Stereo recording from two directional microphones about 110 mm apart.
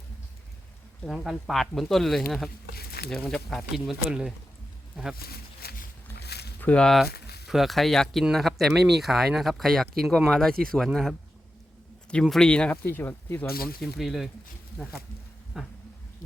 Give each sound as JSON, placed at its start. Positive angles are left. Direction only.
{"t": 1.0, "sound": "speech", "side_deg": -5}
{"t": 4.1, "sound": "speech", "side_deg": -5}
{"t": 6.6, "sound": "speech", "side_deg": 10}
{"t": 12.2, "sound": "speech", "side_deg": 5}
{"t": 13.9, "sound": "speech", "side_deg": 0}
{"t": 15.6, "sound": "speech", "side_deg": 0}